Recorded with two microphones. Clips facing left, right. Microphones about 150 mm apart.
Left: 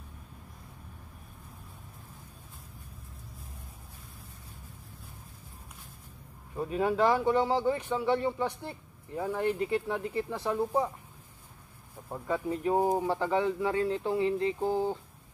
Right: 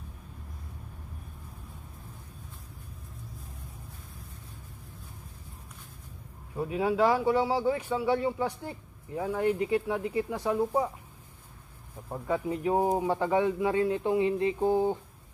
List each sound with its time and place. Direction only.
6.5 s speech: 10° right (ahead or behind)
12.1 s speech: 15° right (ahead or behind)